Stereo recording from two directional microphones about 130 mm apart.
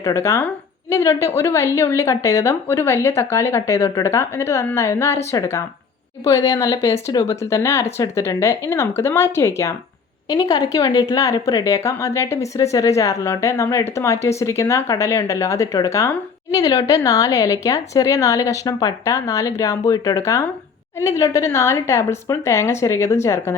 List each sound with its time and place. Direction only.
0.0 s speech: 20° left (ahead or behind)